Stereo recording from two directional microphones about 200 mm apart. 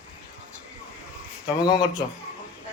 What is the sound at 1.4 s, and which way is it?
Speech, 20° left (ahead or behind).